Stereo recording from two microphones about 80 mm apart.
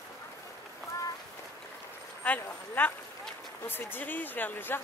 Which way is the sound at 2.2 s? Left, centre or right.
Left.